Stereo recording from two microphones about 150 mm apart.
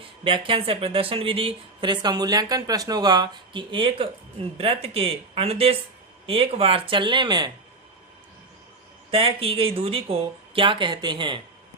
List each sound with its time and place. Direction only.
0.3 s speech: 35° right (ahead or behind)
9.0 s speech: 40° right (ahead or behind)